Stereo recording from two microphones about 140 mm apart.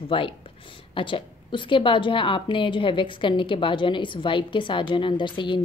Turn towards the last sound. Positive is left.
turn(degrees=35)  # may be behind; listen again after turning